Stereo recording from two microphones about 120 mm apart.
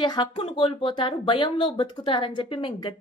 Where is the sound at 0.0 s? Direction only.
40° left (ahead or behind).